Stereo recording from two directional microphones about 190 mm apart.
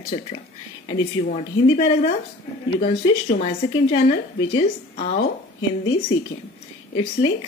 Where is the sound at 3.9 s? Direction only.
25° left (ahead or behind).